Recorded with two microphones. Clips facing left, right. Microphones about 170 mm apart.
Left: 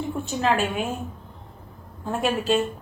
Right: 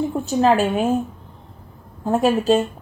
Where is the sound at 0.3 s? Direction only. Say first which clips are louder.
Right 7 dB; 35° right (ahead or behind).